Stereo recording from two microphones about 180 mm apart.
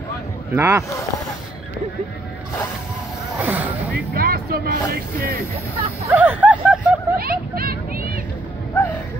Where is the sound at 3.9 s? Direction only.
55° right (ahead or behind).